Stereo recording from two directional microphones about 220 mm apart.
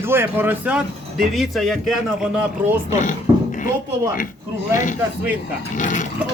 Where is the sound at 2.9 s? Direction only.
35° left (ahead or behind).